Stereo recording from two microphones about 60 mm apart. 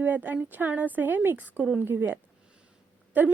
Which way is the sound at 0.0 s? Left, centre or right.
Right.